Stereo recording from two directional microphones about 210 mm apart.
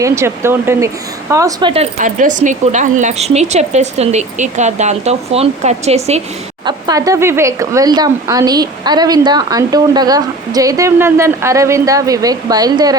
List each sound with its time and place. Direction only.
0.0 s speech: 10° right (ahead or behind); by 6.2 s 30° right (ahead or behind)
6.7 s speech: 20° right (ahead or behind)